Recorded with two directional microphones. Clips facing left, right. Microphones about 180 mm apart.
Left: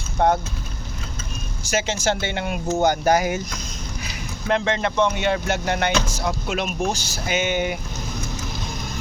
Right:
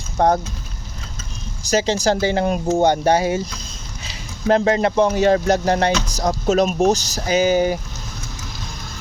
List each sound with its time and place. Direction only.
0.2 s speech: 35° right (ahead or behind)
1.6 s speech: 35° right (ahead or behind)